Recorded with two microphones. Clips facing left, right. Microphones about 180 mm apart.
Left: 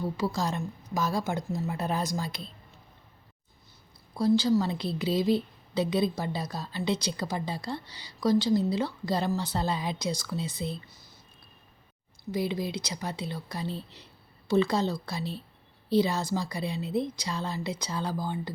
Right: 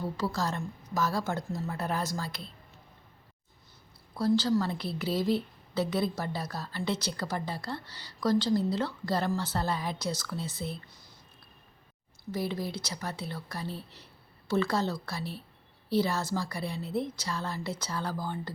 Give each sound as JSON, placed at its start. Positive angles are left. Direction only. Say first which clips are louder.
{"t": 0.2, "sound": "a woman's voice", "louder": "left 1 dB", "side_deg": 15}
{"t": 4.2, "sound": "a woman's voice", "louder": "left 3 dB", "side_deg": 10}
{"t": 12.3, "sound": "a woman's voice", "louder": "left 3 dB", "side_deg": 15}